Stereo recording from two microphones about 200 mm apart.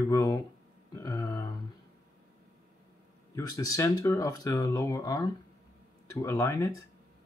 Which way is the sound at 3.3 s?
15° left (ahead or behind).